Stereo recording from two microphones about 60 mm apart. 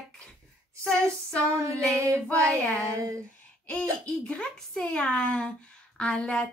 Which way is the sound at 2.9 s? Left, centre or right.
Right.